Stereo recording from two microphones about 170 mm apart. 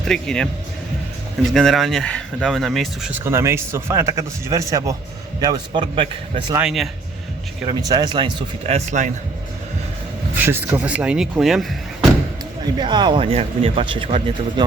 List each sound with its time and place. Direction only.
0.0 s speech: 5° left (ahead or behind)
1.5 s speech: centre (ahead or behind)
3.1 s speech: 15° right (ahead or behind)
6.6 s speech: 5° right (ahead or behind)
7.7 s speech: 20° right (ahead or behind)
8.6 s a man's voice: 40° right (ahead or behind)
10.3 s speech: 10° right (ahead or behind)
12.7 s speech: 25° right (ahead or behind)